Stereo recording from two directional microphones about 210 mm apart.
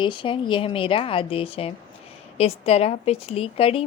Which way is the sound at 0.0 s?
25° left (ahead or behind).